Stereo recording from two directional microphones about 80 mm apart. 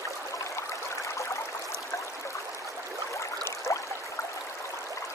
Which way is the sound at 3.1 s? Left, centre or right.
Left.